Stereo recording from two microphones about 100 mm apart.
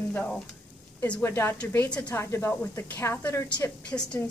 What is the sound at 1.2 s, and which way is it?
A woman's voice, 25° left (ahead or behind).